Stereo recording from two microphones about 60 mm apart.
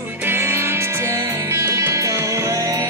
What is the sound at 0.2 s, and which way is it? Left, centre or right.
Music, right.